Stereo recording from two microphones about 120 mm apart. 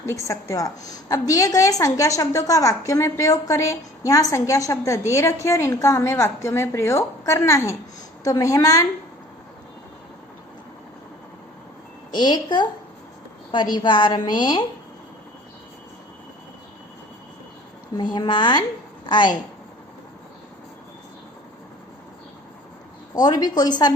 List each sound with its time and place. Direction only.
0.0 s a woman's voice: 25° left (ahead or behind)
12.1 s a woman's voice: 35° left (ahead or behind)
17.9 s a woman's voice: 35° left (ahead or behind)
23.1 s a woman's voice: 35° left (ahead or behind)